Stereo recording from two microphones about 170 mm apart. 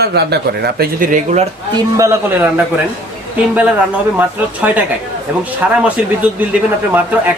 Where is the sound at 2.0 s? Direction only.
15° right (ahead or behind).